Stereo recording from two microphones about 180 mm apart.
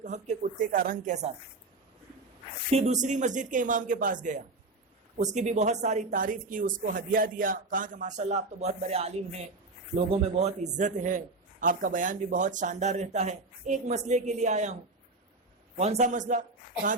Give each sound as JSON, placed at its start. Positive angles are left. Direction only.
{"t": 0.0, "sound": "speech", "side_deg": -40}
{"t": 2.6, "sound": "a woman's voice", "side_deg": -35}
{"t": 15.8, "sound": "speech", "side_deg": -40}